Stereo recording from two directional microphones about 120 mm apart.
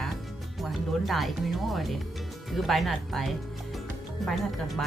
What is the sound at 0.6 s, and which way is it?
Speech, centre (ahead or behind).